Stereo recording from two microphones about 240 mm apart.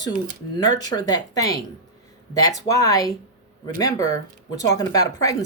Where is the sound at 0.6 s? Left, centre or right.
Centre.